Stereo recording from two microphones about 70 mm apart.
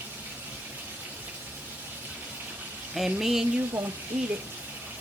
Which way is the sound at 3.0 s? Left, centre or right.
Centre.